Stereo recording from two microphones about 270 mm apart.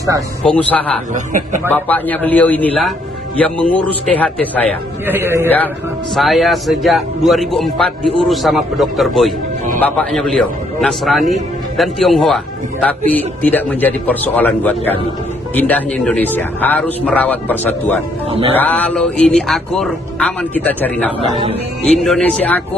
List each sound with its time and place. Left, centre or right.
0.5 s a man's voice: centre
1.1 s speech: right
1.7 s a man's voice: centre
5.0 s a man's voice: centre